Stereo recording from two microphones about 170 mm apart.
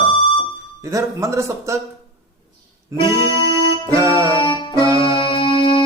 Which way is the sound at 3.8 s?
20° right (ahead or behind).